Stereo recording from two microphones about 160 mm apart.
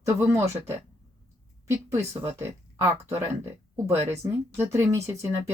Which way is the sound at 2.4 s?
15° right (ahead or behind).